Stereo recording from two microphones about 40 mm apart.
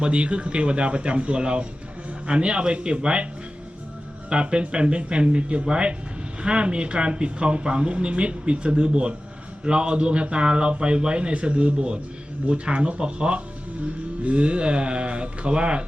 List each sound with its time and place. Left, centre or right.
0.0 s speech: right
4.3 s speech: right